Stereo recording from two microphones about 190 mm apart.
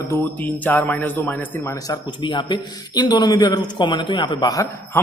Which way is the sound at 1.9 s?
25° left (ahead or behind).